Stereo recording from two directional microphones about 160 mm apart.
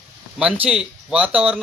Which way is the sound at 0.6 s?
5° right (ahead or behind).